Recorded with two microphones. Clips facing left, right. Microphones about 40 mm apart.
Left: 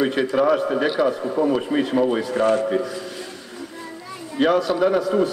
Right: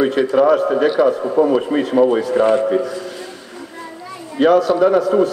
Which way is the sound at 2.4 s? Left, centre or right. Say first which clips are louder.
Right 3 dB; right.